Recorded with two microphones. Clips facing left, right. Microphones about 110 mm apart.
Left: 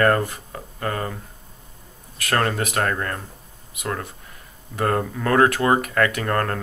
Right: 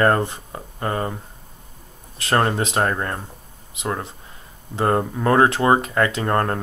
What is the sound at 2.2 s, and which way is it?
Speech, 25° right (ahead or behind).